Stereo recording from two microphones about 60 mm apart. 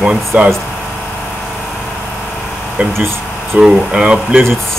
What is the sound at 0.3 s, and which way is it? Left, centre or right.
Speech, centre.